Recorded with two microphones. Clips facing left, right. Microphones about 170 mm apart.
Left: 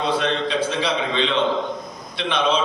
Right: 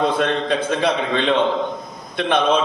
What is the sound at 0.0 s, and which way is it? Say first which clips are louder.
A man's voice: right 3 dB; 50° right (ahead or behind).